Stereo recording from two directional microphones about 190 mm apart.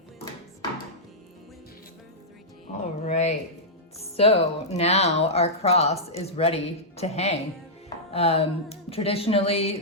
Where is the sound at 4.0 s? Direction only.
30° left (ahead or behind).